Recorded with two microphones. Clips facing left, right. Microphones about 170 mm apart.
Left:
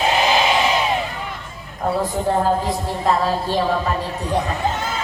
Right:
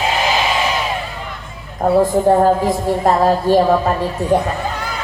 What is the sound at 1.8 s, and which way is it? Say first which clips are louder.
A woman's voice: right 8 dB; 50° right (ahead or behind).